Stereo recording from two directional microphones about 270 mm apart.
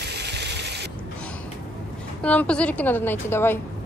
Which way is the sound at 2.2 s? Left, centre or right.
Centre.